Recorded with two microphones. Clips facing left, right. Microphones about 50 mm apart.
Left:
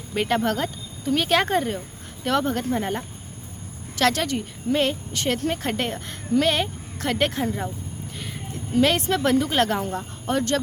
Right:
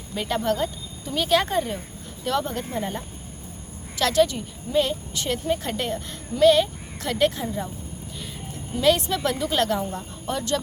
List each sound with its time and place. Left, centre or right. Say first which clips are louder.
0.1 s speech: left 2 dB; left